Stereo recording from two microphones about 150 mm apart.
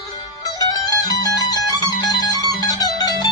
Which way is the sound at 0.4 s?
25° left (ahead or behind).